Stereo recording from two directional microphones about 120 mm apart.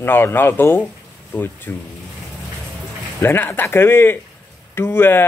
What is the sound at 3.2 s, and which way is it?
Speech, 20° left (ahead or behind).